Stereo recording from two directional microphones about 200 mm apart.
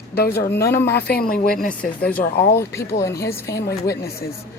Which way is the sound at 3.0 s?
15° left (ahead or behind).